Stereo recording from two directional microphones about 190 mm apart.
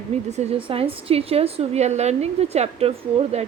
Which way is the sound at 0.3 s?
35° right (ahead or behind).